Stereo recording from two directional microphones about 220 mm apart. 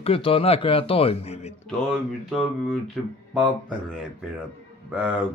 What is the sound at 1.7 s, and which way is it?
Speech, centre (ahead or behind).